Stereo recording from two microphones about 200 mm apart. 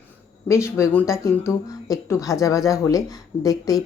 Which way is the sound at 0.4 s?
15° left (ahead or behind).